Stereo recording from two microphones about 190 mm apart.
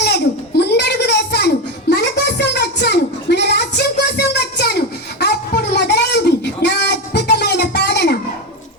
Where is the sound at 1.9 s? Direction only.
60° left (ahead or behind).